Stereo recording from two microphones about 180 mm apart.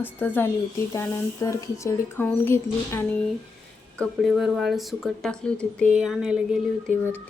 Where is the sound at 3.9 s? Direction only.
Centre (ahead or behind).